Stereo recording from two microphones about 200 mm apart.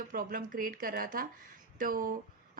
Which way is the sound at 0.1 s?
45° right (ahead or behind).